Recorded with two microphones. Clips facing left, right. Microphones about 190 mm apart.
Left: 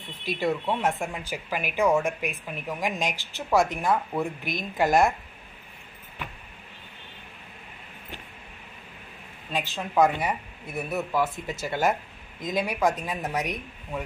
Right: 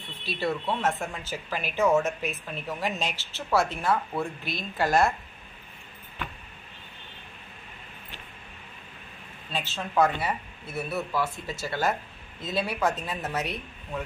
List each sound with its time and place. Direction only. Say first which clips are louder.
0.0 s speech: left 3 dB; 15° left (ahead or behind)
9.5 s speech: left 2 dB; 15° left (ahead or behind)